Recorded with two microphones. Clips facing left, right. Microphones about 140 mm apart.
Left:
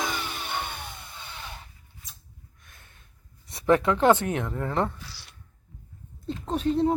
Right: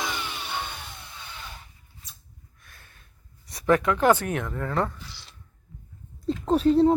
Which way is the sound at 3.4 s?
25° left (ahead or behind).